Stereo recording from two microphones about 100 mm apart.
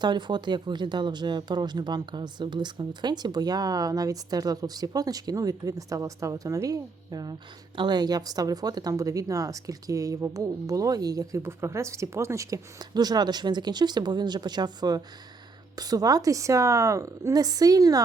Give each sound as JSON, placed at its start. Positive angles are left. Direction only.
{"t": 0.0, "sound": "speech", "side_deg": -50}